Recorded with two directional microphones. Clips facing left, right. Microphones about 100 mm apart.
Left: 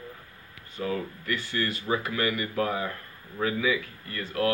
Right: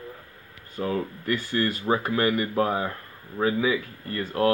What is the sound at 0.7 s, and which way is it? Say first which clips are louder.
Speech: right 3 dB; 40° right (ahead or behind).